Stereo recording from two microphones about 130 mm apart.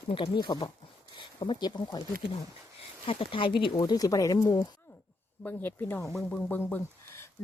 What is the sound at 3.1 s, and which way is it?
Speech, 45° left (ahead or behind).